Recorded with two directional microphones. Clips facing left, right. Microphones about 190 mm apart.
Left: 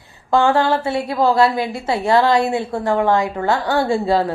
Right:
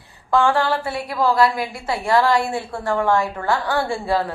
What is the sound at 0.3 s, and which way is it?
A woman's voice, 25° left (ahead or behind).